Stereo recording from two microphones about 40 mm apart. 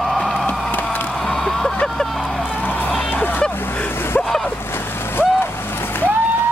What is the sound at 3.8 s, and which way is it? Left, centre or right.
Vehicle, left.